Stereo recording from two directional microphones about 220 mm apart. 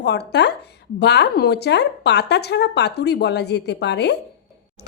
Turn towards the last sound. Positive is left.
turn(degrees=50)  # may be behind; listen again after turning